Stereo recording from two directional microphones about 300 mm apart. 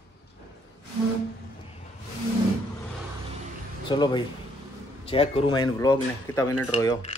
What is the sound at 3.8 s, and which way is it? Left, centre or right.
A man's voice, centre.